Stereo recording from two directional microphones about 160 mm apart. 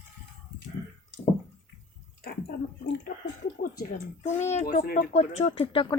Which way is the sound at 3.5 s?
65° left (ahead or behind).